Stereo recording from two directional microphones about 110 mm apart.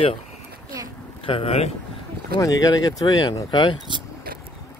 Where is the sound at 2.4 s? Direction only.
35° left (ahead or behind).